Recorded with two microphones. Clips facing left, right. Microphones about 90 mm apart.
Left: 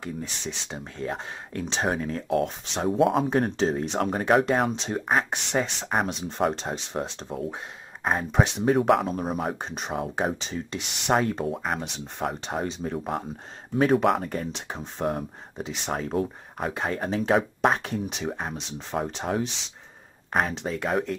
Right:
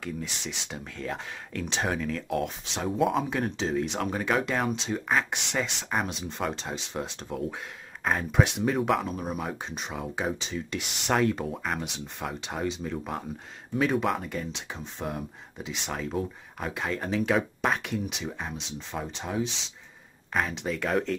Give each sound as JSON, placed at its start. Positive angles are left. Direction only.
{"t": 0.0, "sound": "speech", "side_deg": 30}
{"t": 2.9, "sound": "speech", "side_deg": 0}
{"t": 3.2, "sound": "speech", "side_deg": 40}
{"t": 7.0, "sound": "speech", "side_deg": 30}
{"t": 8.7, "sound": "speech", "side_deg": 45}
{"t": 10.7, "sound": "speech", "side_deg": 25}
{"t": 13.7, "sound": "speech", "side_deg": 50}
{"t": 20.3, "sound": "speech", "side_deg": 40}
{"t": 20.8, "sound": "speech", "side_deg": 10}